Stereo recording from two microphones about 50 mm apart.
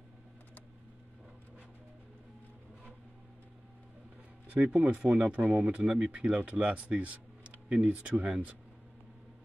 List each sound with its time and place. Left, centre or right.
4.5 s speech: right